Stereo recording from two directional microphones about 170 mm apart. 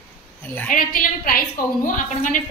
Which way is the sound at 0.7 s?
55° left (ahead or behind).